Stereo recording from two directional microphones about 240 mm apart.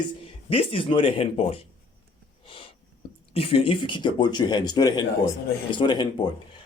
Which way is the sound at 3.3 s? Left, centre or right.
Left.